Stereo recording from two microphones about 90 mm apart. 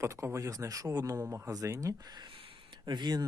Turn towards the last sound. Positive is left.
turn(degrees=-55)  # may be behind; listen again after turning